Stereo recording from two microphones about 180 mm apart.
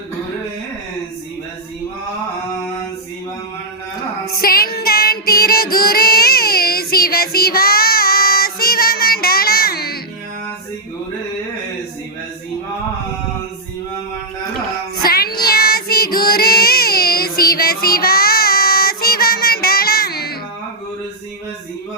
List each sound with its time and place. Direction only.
4.3 s child singing: 55° left (ahead or behind)
15.0 s child singing: 55° left (ahead or behind)